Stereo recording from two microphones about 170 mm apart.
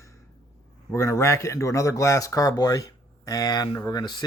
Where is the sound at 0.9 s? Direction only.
15° left (ahead or behind).